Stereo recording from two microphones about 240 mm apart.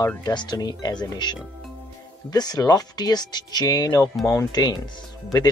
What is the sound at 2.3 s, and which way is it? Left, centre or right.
Speech, centre.